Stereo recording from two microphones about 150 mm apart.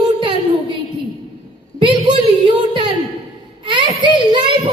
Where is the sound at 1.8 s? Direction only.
35° right (ahead or behind).